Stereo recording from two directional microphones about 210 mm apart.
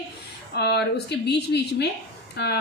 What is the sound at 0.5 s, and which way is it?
A woman's voice, 50° left (ahead or behind).